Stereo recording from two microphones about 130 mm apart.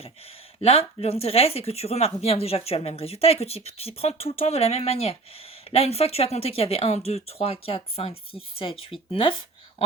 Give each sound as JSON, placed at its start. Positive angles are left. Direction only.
{"t": 0.6, "sound": "speech", "side_deg": 50}